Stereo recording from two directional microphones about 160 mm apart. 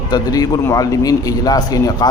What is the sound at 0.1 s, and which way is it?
A man's voice, 25° left (ahead or behind).